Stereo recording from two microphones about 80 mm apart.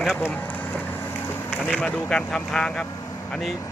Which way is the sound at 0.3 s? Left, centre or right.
Left.